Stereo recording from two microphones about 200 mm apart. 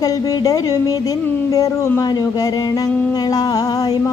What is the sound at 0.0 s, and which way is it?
Speech, 20° left (ahead or behind).